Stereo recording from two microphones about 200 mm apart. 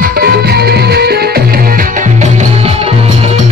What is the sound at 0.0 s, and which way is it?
Music, 50° right (ahead or behind).